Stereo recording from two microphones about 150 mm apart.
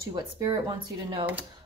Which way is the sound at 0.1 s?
35° right (ahead or behind).